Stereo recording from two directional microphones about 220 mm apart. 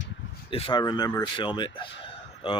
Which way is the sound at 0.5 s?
25° left (ahead or behind).